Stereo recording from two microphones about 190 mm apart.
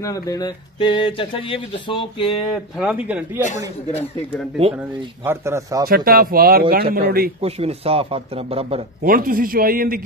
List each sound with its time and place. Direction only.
0.0 s speech: 15° left (ahead or behind)
2.8 s a man's voice: 5° right (ahead or behind)
5.2 s a man's voice: 15° right (ahead or behind)
5.9 s a man's voice: 50° right (ahead or behind)
7.4 s a man's voice: 30° right (ahead or behind)
9.0 s a man's voice: 50° right (ahead or behind)